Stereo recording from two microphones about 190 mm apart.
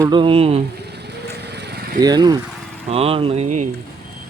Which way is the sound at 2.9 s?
30° right (ahead or behind).